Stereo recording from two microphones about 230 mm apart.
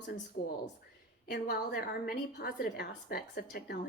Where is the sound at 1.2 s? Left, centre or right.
Left.